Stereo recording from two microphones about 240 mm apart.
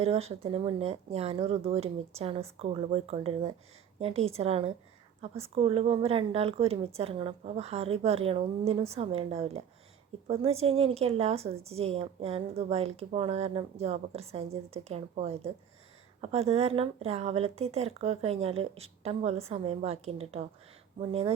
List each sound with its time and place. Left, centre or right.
0.0 s a woman's voice: right